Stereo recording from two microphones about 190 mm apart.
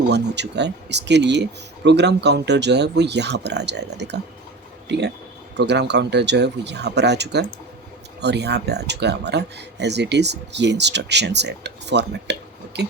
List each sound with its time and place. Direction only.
0.1 s speech: 65° right (ahead or behind)